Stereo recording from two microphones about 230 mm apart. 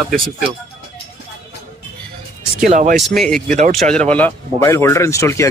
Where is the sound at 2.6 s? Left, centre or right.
Right.